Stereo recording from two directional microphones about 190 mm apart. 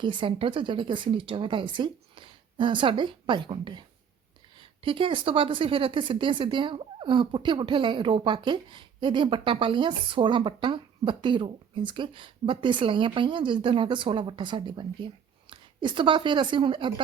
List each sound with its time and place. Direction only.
0.0 s speech: 25° right (ahead or behind)